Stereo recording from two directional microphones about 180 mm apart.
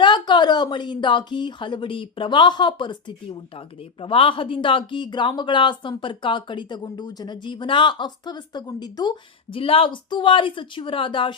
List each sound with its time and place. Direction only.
0.0 s speech: 25° left (ahead or behind)
4.0 s speech: 30° left (ahead or behind)